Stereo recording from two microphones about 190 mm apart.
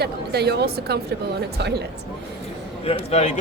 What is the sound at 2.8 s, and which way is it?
Speech, 30° left (ahead or behind).